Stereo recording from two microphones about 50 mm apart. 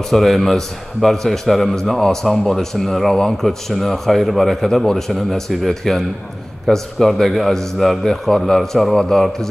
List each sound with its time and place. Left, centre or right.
0.1 s a man's voice: centre